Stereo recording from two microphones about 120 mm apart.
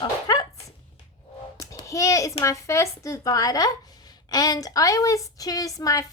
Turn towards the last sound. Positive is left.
turn(degrees=30)  # may be behind; listen again after turning